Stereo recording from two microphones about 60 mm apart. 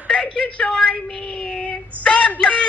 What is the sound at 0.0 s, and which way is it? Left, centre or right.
A woman's voice, centre.